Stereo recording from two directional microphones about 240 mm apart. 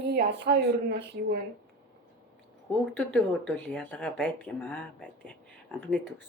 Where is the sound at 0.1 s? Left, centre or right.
Right.